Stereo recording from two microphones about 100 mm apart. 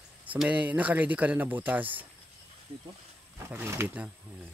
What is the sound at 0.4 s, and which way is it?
Speech, 15° right (ahead or behind).